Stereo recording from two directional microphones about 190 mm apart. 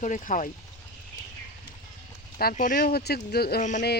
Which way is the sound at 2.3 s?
45° left (ahead or behind).